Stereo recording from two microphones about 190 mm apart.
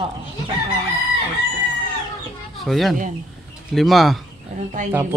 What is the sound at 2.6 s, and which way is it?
Speech, centre (ahead or behind).